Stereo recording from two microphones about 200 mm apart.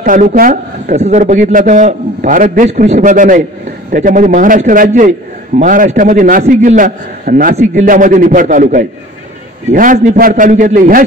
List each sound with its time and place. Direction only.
0.0 s a man's voice: 40° right (ahead or behind)